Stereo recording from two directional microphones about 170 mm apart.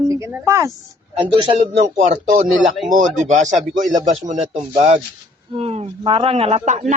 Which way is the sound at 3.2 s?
45° right (ahead or behind).